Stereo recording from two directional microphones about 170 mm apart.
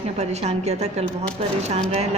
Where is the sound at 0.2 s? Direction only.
40° right (ahead or behind).